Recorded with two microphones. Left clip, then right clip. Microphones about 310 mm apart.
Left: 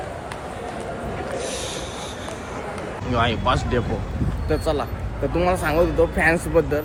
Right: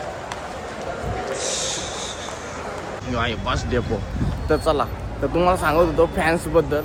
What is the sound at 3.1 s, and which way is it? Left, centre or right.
Speech, centre.